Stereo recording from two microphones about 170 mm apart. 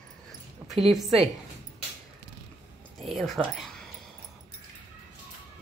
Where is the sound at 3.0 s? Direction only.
Centre (ahead or behind).